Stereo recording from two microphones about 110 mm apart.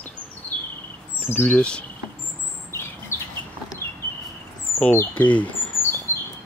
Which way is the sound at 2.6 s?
25° left (ahead or behind).